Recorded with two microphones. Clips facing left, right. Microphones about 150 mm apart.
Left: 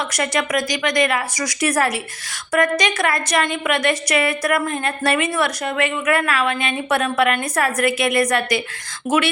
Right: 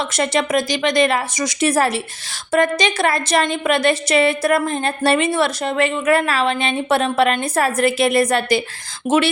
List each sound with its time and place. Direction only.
0.1 s a woman's voice: 30° right (ahead or behind)